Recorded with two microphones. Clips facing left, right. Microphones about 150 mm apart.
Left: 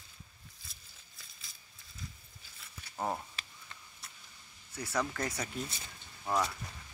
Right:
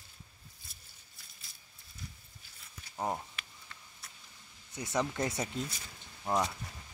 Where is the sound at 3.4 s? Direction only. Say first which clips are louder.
Even; 30° left (ahead or behind).